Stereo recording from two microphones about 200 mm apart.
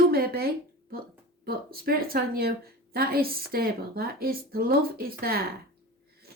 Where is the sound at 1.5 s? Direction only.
50° right (ahead or behind).